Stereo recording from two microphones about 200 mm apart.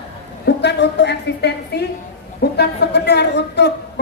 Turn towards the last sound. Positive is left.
turn(degrees=60)  # may be behind; listen again after turning